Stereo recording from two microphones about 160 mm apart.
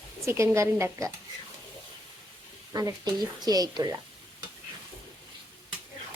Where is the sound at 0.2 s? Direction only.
20° right (ahead or behind).